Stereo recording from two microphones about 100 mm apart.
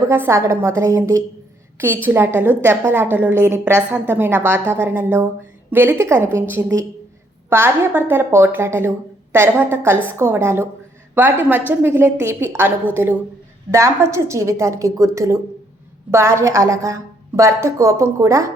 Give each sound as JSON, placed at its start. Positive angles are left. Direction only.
{"t": 0.1, "sound": "a woman's voice", "side_deg": -25}